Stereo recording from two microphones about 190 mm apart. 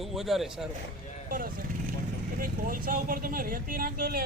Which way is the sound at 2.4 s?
50° right (ahead or behind).